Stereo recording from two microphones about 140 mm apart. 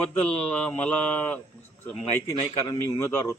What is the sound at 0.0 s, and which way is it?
Speech, 10° left (ahead or behind).